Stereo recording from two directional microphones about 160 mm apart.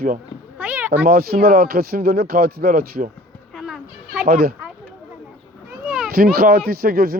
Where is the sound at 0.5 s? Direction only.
10° right (ahead or behind).